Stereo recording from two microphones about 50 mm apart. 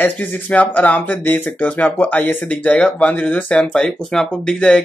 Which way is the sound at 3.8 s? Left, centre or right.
Centre.